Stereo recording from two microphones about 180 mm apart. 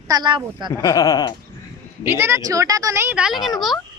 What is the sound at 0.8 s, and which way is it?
Speech, 20° left (ahead or behind).